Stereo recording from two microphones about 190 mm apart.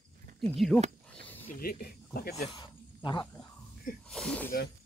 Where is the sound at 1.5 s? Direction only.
50° left (ahead or behind).